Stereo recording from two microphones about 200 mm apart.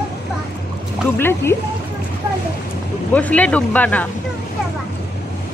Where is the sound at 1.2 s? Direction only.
10° left (ahead or behind).